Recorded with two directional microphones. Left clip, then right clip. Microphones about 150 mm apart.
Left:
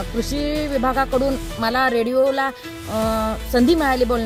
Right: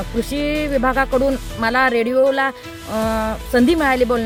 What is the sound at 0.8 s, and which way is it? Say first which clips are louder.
Speech: right 2 dB; 30° right (ahead or behind).